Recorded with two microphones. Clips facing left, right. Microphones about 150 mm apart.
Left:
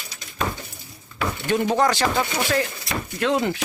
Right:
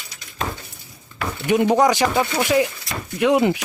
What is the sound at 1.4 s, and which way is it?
Speech, 15° right (ahead or behind).